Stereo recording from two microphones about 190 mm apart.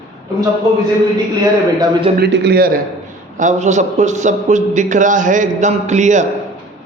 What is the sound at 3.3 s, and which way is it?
A man's voice, 40° right (ahead or behind).